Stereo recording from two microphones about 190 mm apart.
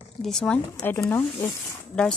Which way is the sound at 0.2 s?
5° left (ahead or behind).